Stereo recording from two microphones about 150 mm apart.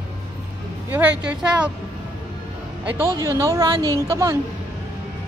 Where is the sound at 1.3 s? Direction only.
5° right (ahead or behind).